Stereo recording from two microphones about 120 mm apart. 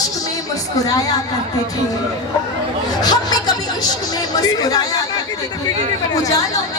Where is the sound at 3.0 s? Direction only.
35° left (ahead or behind).